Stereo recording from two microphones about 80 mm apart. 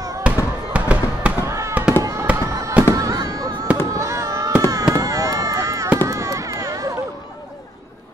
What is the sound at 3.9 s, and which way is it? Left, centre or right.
Fireworks, right.